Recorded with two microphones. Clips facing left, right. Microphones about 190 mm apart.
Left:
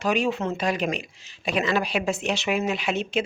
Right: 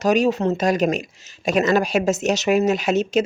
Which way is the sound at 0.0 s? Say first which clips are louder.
Right 6 dB; 40° right (ahead or behind).